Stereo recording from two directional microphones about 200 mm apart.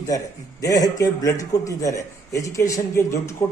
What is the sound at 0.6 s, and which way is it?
A man's voice, 15° left (ahead or behind).